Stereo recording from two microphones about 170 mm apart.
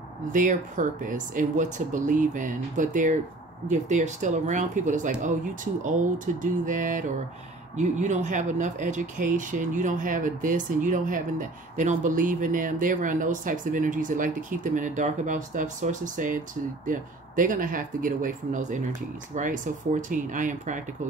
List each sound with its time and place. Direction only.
0.3 s speech: 50° right (ahead or behind)